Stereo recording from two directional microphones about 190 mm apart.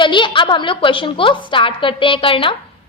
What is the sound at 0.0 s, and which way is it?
A woman's voice, 25° left (ahead or behind).